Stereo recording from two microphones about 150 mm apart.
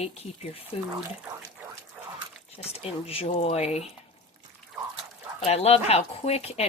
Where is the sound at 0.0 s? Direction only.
45° left (ahead or behind).